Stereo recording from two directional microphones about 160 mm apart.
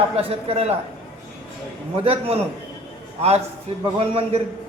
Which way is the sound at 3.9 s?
35° right (ahead or behind).